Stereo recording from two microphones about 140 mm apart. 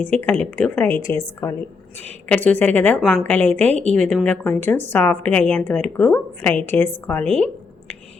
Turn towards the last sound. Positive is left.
turn(degrees=10)  # may be behind; listen again after turning